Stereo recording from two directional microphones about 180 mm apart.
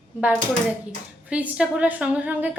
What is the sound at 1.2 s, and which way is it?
A woman's voice, 5° right (ahead or behind).